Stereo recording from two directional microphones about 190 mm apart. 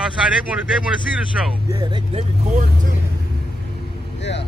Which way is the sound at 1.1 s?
5° right (ahead or behind).